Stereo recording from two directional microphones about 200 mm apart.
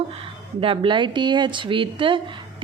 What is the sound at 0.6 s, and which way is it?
Speech, 25° right (ahead or behind).